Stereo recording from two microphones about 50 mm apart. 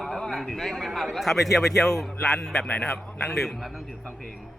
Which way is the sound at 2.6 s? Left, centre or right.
Left.